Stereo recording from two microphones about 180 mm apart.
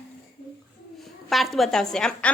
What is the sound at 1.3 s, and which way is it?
A woman's voice, centre (ahead or behind).